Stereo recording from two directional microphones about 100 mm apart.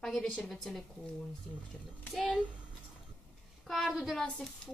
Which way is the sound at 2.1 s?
Centre (ahead or behind).